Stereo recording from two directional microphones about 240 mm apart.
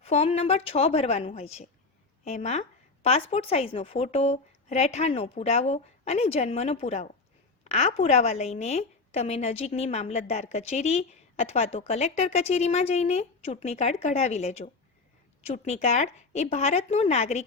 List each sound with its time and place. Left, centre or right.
0.0 s a woman's voice: left